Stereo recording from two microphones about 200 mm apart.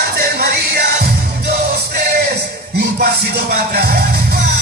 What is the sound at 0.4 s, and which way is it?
Music, 50° right (ahead or behind).